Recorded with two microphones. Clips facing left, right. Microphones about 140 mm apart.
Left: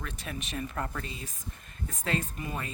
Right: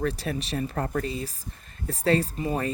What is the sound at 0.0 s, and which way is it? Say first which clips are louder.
Speech: right 11 dB; 35° right (ahead or behind).